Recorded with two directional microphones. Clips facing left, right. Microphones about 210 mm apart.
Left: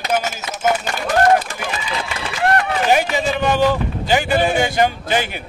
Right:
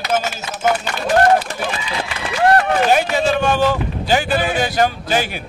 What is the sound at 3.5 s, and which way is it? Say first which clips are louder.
Speech: even; 15° left (ahead or behind).